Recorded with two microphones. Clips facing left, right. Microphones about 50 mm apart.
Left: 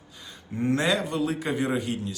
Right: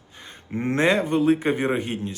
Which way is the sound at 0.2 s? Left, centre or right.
Right.